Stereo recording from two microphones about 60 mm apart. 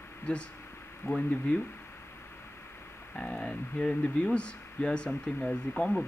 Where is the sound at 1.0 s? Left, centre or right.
Left.